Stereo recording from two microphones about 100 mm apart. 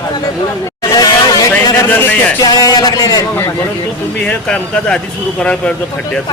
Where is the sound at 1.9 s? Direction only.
20° left (ahead or behind).